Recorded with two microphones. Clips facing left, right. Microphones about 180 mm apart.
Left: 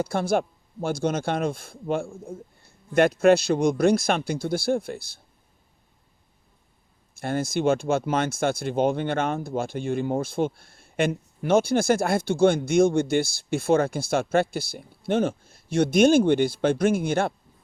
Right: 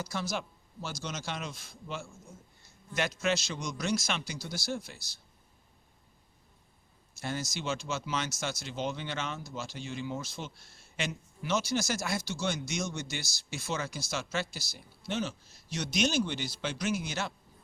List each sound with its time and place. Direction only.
0.0 s speech: 55° left (ahead or behind)
7.1 s speech: 55° left (ahead or behind)